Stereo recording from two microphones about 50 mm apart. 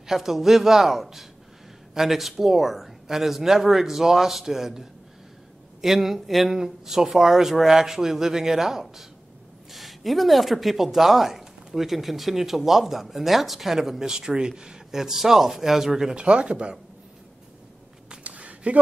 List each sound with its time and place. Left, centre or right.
0.0 s speech: centre
16.2 s speech: right
18.2 s a sound: right